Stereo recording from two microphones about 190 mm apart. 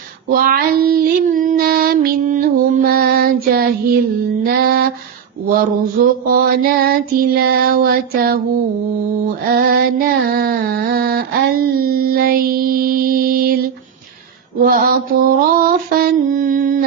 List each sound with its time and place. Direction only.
0.3 s child singing: 50° right (ahead or behind)
4.4 s mantra: 50° right (ahead or behind)
5.5 s female singing: 50° right (ahead or behind)
9.5 s female singing: 50° right (ahead or behind)
14.6 s mantra: 50° right (ahead or behind)